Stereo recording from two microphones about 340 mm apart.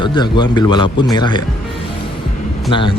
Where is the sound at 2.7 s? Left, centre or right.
Centre.